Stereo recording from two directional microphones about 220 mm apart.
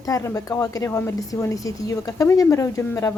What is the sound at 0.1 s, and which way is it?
A woman's voice, 15° left (ahead or behind).